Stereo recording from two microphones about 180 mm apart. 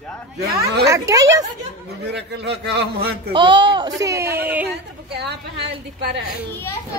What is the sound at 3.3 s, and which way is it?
Speech, 25° right (ahead or behind).